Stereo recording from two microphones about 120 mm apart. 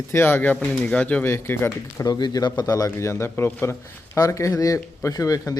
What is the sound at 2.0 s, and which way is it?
A man's voice, 35° left (ahead or behind).